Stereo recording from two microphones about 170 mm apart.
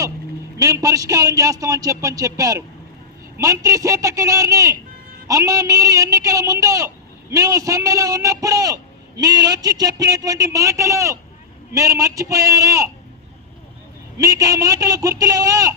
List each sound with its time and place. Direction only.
0.6 s a man's voice: 20° right (ahead or behind)
14.2 s a man's voice: 20° right (ahead or behind)